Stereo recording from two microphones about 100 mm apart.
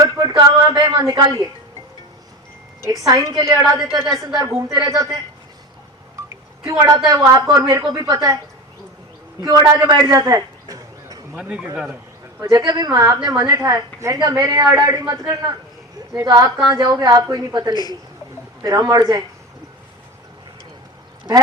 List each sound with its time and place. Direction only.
0.0 s a sound: 40° right (ahead or behind)
0.9 s speech: 45° right (ahead or behind)
2.9 s a woman's voice: 35° right (ahead or behind)
6.2 s a sound: 35° right (ahead or behind)
7.1 s a woman's voice: 35° right (ahead or behind)
9.4 s a woman's voice: 35° right (ahead or behind)
10.0 s a sound: 35° right (ahead or behind)
11.3 s a man's voice: 10° right (ahead or behind)
12.4 s a woman's voice: 35° right (ahead or behind)